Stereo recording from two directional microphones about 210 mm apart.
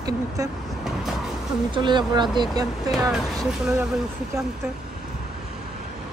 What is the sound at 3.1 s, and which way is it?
Speech, centre (ahead or behind).